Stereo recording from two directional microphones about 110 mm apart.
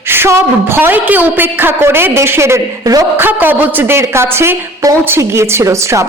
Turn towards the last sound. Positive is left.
turn(degrees=-25)  # may be behind; listen again after turning